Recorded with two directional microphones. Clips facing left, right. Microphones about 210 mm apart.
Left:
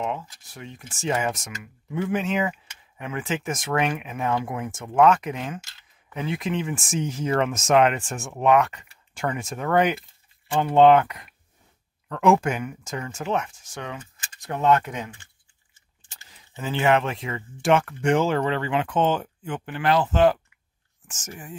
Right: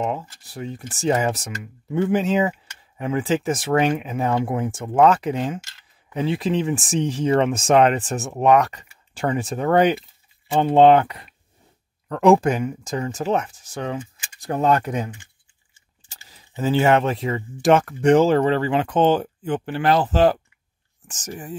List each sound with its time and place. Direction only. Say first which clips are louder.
0.0 s speech: right 4 dB; 35° right (ahead or behind)
16.1 s speech: right 2 dB; 35° right (ahead or behind)